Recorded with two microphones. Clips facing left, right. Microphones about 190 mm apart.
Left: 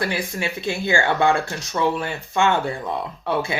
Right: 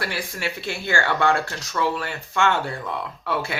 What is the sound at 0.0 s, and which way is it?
Speech, 20° left (ahead or behind).